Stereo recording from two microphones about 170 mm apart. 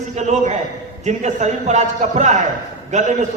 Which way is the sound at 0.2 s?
45° right (ahead or behind).